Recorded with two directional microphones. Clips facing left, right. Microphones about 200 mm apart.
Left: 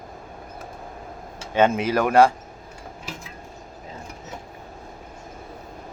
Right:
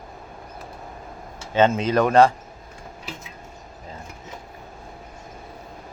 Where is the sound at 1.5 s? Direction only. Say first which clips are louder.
Right 1 dB; 10° left (ahead or behind).